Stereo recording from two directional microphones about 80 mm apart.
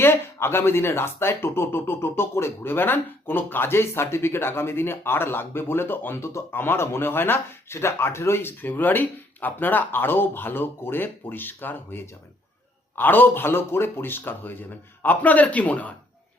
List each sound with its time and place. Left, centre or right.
0.0 s speech: left